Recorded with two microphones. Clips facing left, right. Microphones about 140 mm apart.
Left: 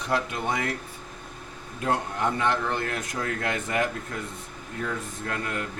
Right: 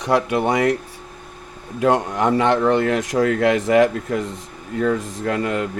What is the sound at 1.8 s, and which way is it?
Speech, 90° right.